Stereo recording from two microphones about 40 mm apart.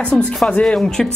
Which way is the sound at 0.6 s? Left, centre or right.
Centre.